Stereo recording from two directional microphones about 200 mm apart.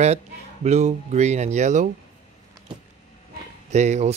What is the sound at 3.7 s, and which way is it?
Speech, 35° right (ahead or behind).